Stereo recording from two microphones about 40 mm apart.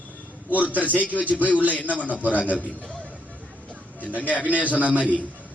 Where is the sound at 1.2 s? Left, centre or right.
Right.